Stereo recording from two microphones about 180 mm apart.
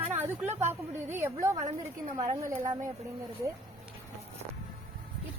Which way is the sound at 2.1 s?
30° right (ahead or behind).